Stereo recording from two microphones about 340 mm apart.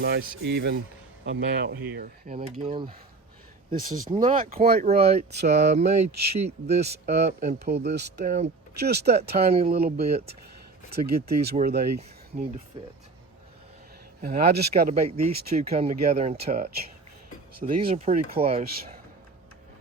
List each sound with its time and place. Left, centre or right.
0.0 s speech: right
2.3 s speech: centre
6.1 s speech: right
6.7 s speech: centre
11.4 s speech: right
14.2 s speech: right